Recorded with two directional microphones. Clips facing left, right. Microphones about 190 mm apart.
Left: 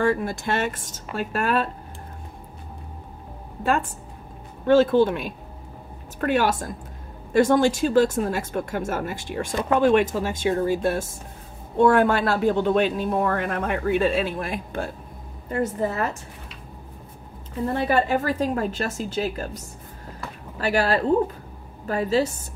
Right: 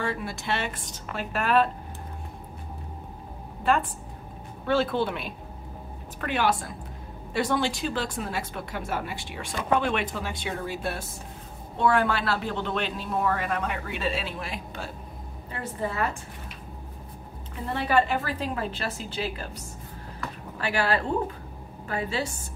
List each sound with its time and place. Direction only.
0.0 s speech: 45° left (ahead or behind)
4.6 s a woman's voice: 45° left (ahead or behind)
17.7 s a woman's voice: 45° left (ahead or behind)